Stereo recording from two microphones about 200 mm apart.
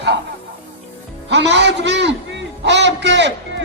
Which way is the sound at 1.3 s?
60° right (ahead or behind).